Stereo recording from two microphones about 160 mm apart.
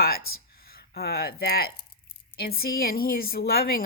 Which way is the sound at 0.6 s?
70° left (ahead or behind).